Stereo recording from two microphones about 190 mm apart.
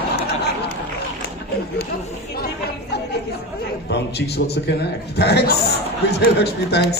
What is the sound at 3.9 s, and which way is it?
Speech, 60° left (ahead or behind).